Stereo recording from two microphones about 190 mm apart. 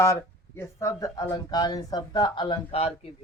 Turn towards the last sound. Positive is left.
turn(degrees=30)  # may be behind; listen again after turning